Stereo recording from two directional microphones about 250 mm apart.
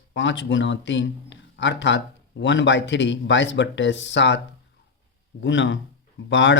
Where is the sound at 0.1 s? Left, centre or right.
Left.